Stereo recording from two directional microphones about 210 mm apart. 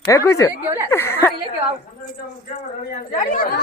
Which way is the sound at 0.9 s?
10° left (ahead or behind).